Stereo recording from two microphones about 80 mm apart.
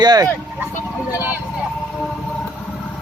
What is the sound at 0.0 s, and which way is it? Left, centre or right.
Speech, right.